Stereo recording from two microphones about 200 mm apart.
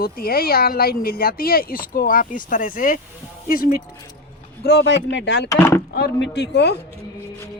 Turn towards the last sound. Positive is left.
turn(degrees=55)  # may be behind; listen again after turning